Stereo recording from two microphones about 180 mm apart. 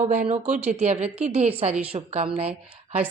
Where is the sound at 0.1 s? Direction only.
40° right (ahead or behind).